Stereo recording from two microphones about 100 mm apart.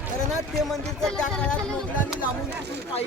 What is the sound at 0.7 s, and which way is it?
Speech, 5° left (ahead or behind).